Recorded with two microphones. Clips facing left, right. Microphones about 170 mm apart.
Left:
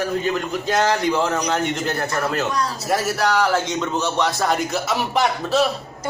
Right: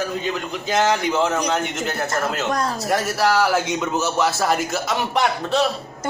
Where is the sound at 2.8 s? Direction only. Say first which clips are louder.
Even; centre (ahead or behind).